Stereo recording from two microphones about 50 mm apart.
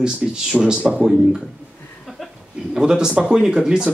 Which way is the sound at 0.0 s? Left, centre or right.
Centre.